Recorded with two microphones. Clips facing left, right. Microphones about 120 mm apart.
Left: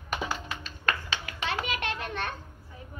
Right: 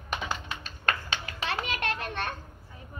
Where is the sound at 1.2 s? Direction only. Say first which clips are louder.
Left 1 dB; 35° right (ahead or behind).